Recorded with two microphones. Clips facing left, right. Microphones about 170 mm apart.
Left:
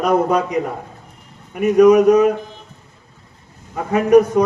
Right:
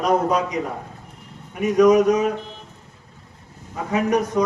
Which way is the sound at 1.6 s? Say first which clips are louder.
Left 4 dB; 55° left (ahead or behind).